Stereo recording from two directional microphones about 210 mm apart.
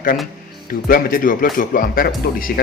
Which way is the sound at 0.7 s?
40° left (ahead or behind).